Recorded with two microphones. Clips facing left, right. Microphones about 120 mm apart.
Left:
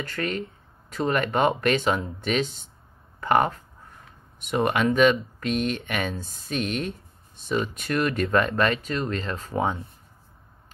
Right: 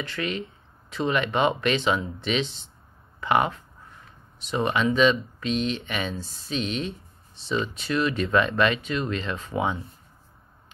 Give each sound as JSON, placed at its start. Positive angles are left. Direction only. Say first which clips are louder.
{"t": 0.0, "sound": "speech", "louder": "left 1 dB", "side_deg": 45}
{"t": 4.6, "sound": "speech", "louder": "left 1 dB", "side_deg": 55}